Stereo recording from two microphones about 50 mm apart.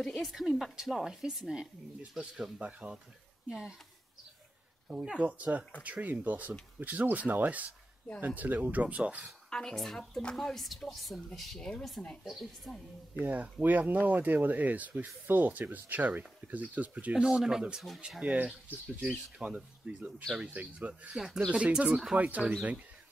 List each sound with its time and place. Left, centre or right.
0.0 s speech: centre
2.6 s speech: right
4.8 s speech: centre
9.5 s a woman's voice: centre
13.2 s speech: right
17.1 s speech: centre
18.2 s speech: right